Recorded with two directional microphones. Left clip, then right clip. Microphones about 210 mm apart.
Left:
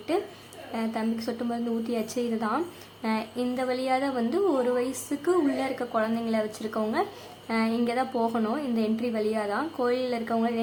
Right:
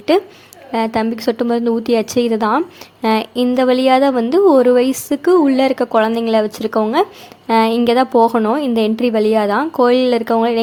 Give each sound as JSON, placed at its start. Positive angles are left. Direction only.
{"t": 0.1, "sound": "a woman's voice", "side_deg": -40}